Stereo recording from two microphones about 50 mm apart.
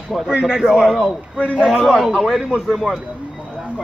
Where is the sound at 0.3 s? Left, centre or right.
Right.